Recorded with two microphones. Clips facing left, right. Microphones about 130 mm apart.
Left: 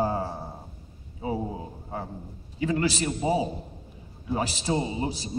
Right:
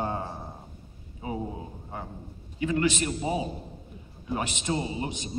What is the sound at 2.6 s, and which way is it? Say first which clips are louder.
Speech: even; 35° left (ahead or behind).